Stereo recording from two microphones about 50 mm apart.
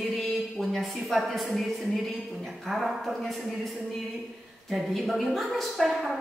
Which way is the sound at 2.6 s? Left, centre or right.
Centre.